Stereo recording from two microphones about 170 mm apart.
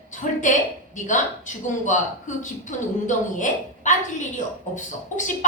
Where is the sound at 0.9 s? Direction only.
45° left (ahead or behind).